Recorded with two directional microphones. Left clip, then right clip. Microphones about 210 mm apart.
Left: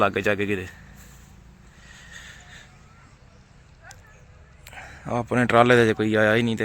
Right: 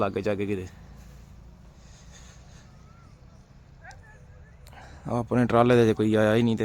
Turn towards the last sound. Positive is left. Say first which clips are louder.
# left 3 dB
turn(degrees=-10)  # may be behind; listen again after turning